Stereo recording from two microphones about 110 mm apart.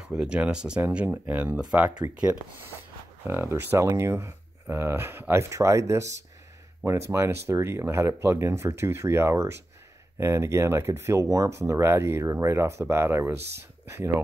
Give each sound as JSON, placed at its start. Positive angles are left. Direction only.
{"t": 0.0, "sound": "speech", "side_deg": -5}
{"t": 3.3, "sound": "speech", "side_deg": -20}